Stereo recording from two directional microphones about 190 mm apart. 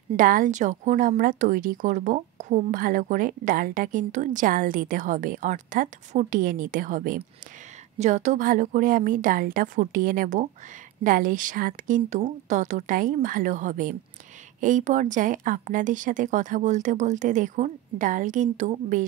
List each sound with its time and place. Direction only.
0.1 s speech: 45° right (ahead or behind)